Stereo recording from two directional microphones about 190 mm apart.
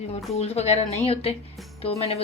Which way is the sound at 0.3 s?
35° left (ahead or behind).